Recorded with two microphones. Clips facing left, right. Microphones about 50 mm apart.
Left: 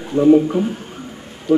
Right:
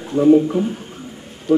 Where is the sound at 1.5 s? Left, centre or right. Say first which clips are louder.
Even; centre.